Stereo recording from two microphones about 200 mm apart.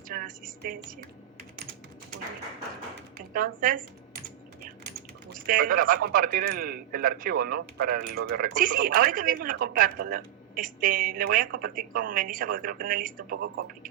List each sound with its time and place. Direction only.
0.1 s speech: 45° right (ahead or behind)
3.3 s speech: 45° right (ahead or behind)
5.5 s speech: 45° right (ahead or behind)